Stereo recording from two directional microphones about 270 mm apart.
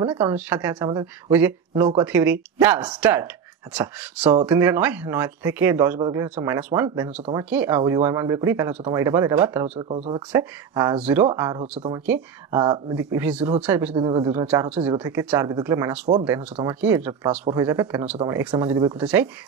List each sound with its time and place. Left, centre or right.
0.0 s speech: centre
9.8 s speech: right
10.3 s speech: centre